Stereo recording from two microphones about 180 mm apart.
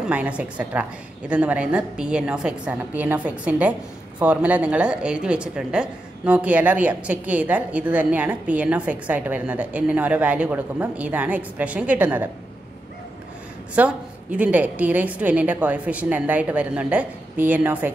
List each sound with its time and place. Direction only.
0.0 s a woman's voice: 5° right (ahead or behind)
13.7 s a woman's voice: 5° right (ahead or behind)